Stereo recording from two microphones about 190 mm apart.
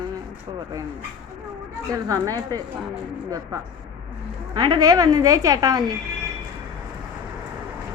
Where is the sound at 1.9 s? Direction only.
20° right (ahead or behind).